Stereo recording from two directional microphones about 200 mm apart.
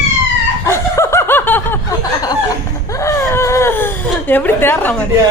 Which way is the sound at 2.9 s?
15° left (ahead or behind).